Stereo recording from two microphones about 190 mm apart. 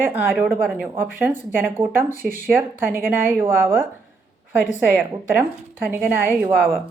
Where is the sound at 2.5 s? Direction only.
10° right (ahead or behind).